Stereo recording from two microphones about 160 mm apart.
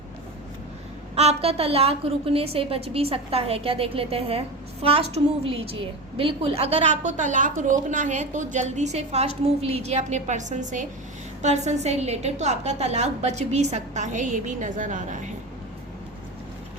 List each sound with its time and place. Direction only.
1.1 s a woman's voice: 40° right (ahead or behind)